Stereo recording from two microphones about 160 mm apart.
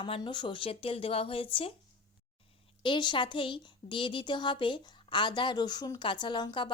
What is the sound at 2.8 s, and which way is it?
Speech, 30° left (ahead or behind).